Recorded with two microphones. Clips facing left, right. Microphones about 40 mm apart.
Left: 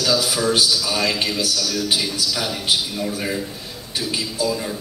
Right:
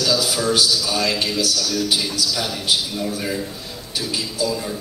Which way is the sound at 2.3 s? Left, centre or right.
Centre.